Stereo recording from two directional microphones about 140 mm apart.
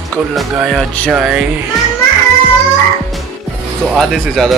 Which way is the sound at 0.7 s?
Centre (ahead or behind).